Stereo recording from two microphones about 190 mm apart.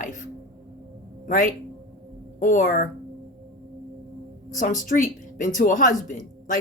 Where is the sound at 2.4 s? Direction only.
45° left (ahead or behind).